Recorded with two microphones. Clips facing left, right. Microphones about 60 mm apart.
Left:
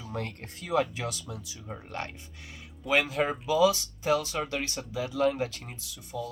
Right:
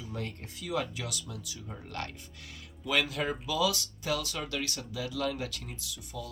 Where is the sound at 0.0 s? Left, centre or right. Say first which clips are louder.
Left 3 dB; left.